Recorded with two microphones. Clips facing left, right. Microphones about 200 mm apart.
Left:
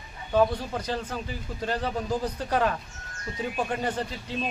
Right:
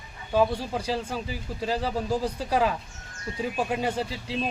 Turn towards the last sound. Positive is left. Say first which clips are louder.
# right 2 dB
turn(degrees=-5)  # may be behind; listen again after turning